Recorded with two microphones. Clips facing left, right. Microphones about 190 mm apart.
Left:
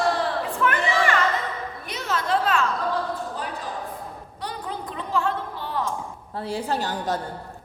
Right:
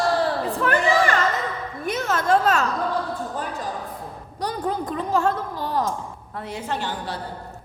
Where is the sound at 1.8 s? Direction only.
50° right (ahead or behind).